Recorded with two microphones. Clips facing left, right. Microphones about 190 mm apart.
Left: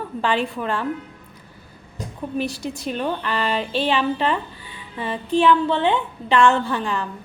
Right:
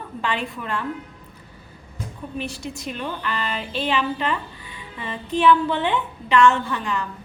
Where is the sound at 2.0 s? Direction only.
40° left (ahead or behind).